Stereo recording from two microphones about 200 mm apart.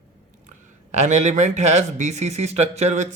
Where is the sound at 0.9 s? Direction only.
35° right (ahead or behind).